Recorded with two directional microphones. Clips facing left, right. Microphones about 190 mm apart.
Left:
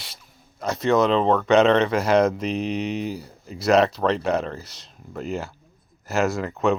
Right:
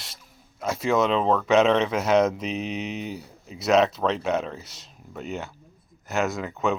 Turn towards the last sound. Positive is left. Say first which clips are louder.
# left 4 dB
turn(degrees=0)  # may be behind; listen again after turning